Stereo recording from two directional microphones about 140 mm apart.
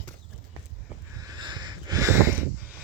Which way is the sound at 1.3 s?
30° right (ahead or behind).